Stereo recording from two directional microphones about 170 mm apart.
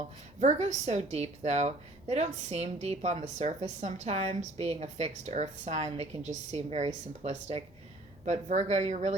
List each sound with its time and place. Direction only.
0.3 s a woman's voice: 40° right (ahead or behind)